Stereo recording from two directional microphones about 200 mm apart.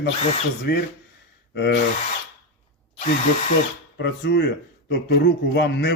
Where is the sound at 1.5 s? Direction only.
60° left (ahead or behind).